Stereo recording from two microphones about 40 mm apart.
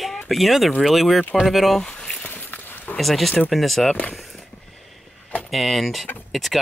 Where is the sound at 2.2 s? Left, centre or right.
Left.